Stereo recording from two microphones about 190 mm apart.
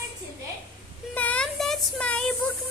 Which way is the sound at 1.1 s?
5° left (ahead or behind).